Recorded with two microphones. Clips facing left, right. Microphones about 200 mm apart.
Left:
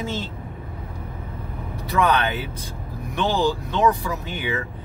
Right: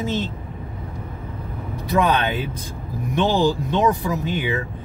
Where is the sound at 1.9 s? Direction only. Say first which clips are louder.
Right 1 dB; 20° right (ahead or behind).